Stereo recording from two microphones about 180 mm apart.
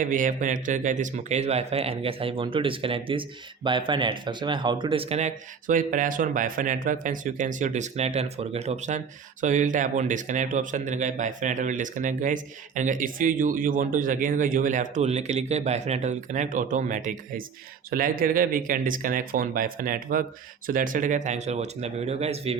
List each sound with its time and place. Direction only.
0.0 s a man's voice: 45° right (ahead or behind)